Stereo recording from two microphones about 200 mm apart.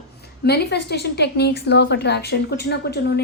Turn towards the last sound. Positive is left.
turn(degrees=55)  # may be behind; listen again after turning